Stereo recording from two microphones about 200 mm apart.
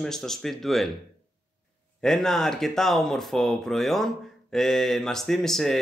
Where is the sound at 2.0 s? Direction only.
5° left (ahead or behind).